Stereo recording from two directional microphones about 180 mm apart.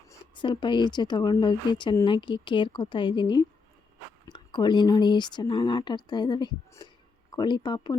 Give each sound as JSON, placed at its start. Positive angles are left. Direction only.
{"t": 0.1, "sound": "speech", "side_deg": 25}